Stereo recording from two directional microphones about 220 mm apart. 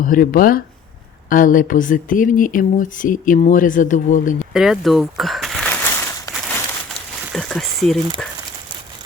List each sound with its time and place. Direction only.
0.0 s speech: 40° left (ahead or behind)
4.5 s a sound: centre (ahead or behind)
7.3 s speech: centre (ahead or behind)